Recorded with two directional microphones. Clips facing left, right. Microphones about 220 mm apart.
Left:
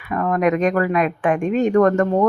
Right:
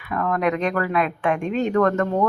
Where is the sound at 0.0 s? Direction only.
15° left (ahead or behind).